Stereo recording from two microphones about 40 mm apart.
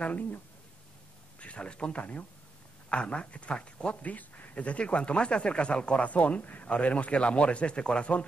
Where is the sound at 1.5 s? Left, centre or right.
Left.